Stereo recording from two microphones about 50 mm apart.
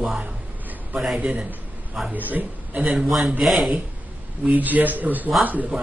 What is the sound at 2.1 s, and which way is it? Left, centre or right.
Speech, right.